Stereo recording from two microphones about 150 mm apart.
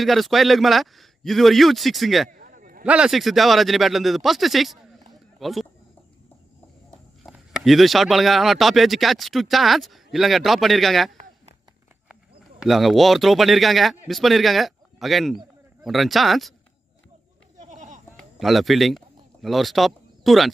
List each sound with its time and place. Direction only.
0.0 s speech: centre (ahead or behind)
2.3 s a sound: 70° right (ahead or behind)
2.8 s speech: 5° right (ahead or behind)
7.2 s speech: centre (ahead or behind)
12.1 s speech: 5° right (ahead or behind)
17.6 s sheep: 55° right (ahead or behind)
18.1 s a sound: centre (ahead or behind)